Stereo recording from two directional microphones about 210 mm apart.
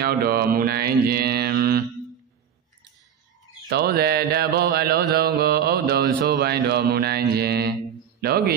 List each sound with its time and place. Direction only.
0.0 s mantra: 45° right (ahead or behind)
3.6 s mantra: 50° right (ahead or behind)